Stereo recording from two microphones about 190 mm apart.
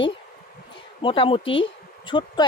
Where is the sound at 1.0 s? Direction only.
25° left (ahead or behind).